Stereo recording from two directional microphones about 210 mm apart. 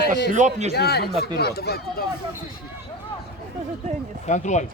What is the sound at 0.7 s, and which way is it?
Speech, 50° left (ahead or behind).